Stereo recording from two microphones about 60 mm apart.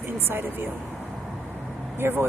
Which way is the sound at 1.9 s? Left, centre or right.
Right.